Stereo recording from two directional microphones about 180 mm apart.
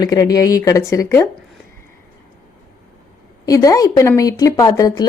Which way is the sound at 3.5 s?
20° left (ahead or behind).